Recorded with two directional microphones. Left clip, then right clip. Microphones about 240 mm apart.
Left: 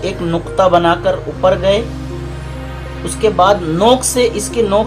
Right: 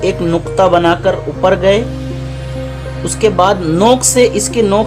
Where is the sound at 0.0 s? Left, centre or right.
Right.